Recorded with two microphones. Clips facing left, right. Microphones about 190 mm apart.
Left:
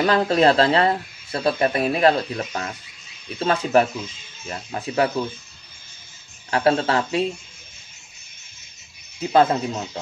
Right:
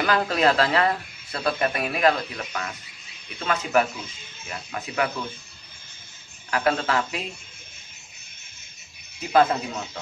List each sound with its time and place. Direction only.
0.0 s speech: 30° left (ahead or behind)
6.5 s speech: 30° left (ahead or behind)
9.3 s speech: 25° left (ahead or behind)